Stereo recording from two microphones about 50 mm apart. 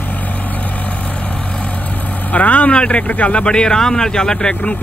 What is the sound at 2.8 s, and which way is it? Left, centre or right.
Speech, left.